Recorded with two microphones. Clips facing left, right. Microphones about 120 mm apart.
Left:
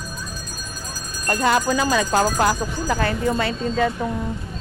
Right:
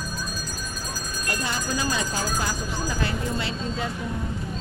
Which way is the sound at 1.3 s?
65° left (ahead or behind).